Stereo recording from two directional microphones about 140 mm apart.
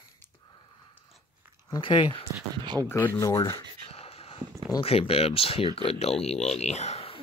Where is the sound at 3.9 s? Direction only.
45° left (ahead or behind).